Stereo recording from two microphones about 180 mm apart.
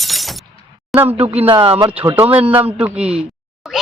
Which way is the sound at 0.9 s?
10° right (ahead or behind).